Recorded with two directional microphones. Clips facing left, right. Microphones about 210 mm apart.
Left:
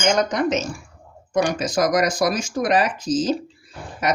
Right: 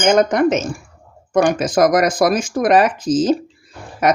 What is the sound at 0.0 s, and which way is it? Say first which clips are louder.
Speech: right 6 dB; 55° right (ahead or behind).